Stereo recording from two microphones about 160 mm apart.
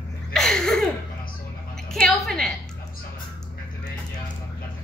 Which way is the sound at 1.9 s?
5° left (ahead or behind).